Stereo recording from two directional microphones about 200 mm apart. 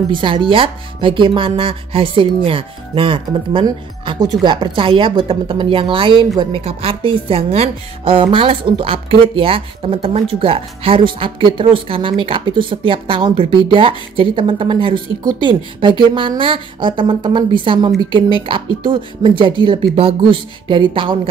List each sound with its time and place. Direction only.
0.1 s a woman's voice: 25° right (ahead or behind)